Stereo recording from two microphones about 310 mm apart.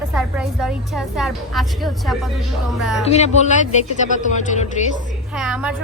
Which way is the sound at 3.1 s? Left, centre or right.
Left.